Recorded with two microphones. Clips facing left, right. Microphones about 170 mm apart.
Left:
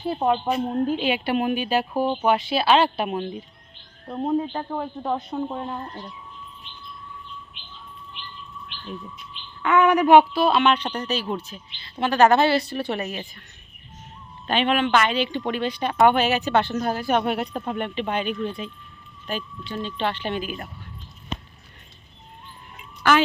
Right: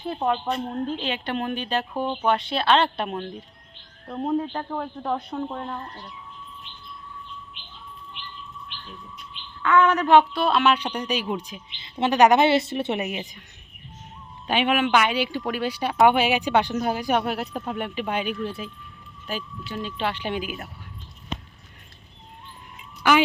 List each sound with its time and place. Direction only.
0.0 s a woman's voice: 5° left (ahead or behind)
5.8 s speech: 20° left (ahead or behind)
9.6 s a woman's voice: 15° left (ahead or behind)
10.4 s a woman's voice: centre (ahead or behind); by 13.4 s 15° right (ahead or behind)
14.4 s speech: 10° right (ahead or behind)
23.1 s speech: 15° right (ahead or behind)